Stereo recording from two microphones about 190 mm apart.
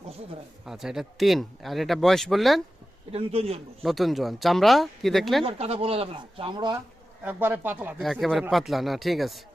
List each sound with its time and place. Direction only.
0.6 s speech: centre (ahead or behind)
3.1 s speech: 30° right (ahead or behind)
3.8 s speech: centre (ahead or behind)
5.5 s speech: 30° right (ahead or behind)
7.3 s speech: 10° right (ahead or behind)
8.0 s speech: centre (ahead or behind)